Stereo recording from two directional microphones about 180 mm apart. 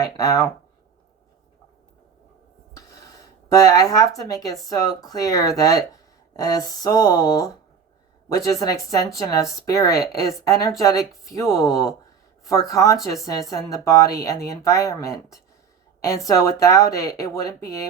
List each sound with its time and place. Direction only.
0.0 s speech: 20° left (ahead or behind)
3.5 s speech: 20° left (ahead or behind)